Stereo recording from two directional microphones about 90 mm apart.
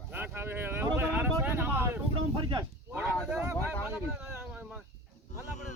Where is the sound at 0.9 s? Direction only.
20° right (ahead or behind).